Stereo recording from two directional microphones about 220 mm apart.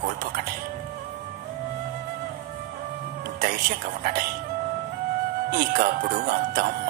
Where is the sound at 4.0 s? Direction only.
40° right (ahead or behind).